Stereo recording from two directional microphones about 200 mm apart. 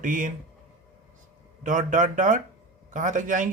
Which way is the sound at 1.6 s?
40° right (ahead or behind).